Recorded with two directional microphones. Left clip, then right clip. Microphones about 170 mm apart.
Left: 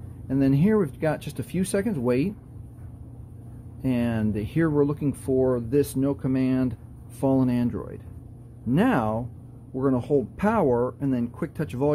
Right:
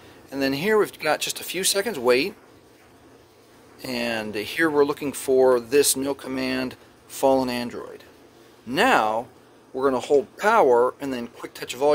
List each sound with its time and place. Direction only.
0.4 s speech: 15° right (ahead or behind)
3.8 s speech: 20° right (ahead or behind)